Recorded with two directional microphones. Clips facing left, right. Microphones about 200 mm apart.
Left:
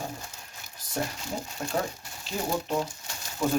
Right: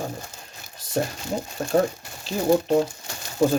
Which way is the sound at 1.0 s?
30° right (ahead or behind).